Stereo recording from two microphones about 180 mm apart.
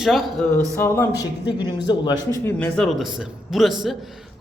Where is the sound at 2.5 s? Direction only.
5° left (ahead or behind).